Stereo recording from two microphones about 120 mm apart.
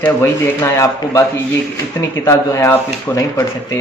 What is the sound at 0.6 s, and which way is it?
Speech, 25° left (ahead or behind).